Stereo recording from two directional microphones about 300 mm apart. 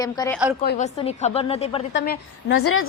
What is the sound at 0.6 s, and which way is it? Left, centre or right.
A woman's voice, left.